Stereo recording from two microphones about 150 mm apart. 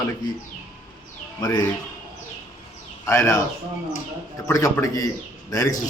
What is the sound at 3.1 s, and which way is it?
Speech, 20° left (ahead or behind).